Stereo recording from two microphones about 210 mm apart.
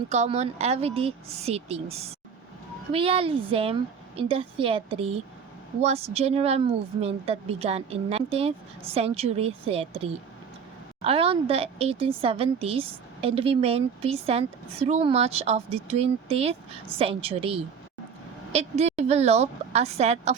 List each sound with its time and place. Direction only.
0.1 s speech: 30° right (ahead or behind)
11.0 s a woman's voice: 25° right (ahead or behind)